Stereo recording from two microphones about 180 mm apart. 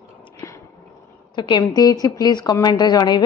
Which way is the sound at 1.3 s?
25° left (ahead or behind).